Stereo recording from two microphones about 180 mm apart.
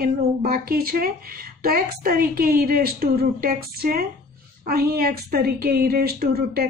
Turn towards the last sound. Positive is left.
turn(degrees=-60)  # may be behind; listen again after turning